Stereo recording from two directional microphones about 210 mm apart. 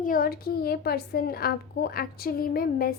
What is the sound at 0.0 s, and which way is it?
A woman's voice, 45° left (ahead or behind).